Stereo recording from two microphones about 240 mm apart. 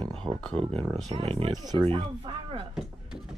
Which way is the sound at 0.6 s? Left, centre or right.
Right.